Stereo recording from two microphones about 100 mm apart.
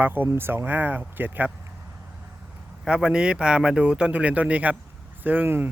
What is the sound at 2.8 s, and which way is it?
Speech, 5° right (ahead or behind).